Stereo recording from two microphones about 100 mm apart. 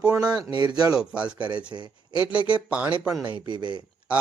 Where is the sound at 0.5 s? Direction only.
45° right (ahead or behind).